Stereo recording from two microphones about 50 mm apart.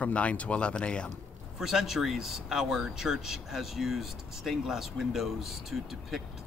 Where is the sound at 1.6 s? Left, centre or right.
Centre.